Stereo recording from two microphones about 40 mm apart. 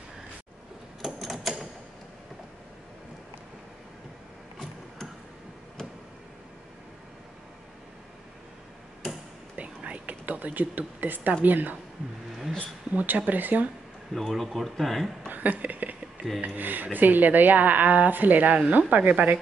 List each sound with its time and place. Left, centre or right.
1.0 s a sound: centre
9.6 s whispering: right
11.4 s speech: right
12.9 s speech: right
14.1 s speech: centre
15.2 s a sound: right
16.3 s speech: right